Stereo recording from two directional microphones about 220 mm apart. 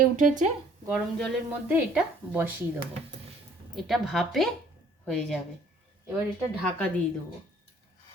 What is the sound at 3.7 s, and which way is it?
A woman's voice, centre (ahead or behind).